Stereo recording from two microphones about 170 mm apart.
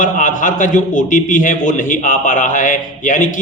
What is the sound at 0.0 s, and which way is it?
A man's voice, 50° left (ahead or behind).